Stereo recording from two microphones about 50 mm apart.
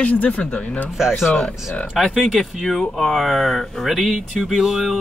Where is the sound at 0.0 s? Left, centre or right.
Left.